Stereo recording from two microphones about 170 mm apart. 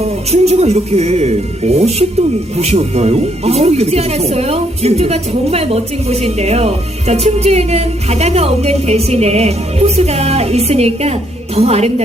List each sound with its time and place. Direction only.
0.3 s speech: 40° right (ahead or behind)